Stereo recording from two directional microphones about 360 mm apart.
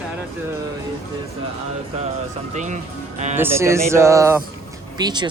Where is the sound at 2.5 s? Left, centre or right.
Centre.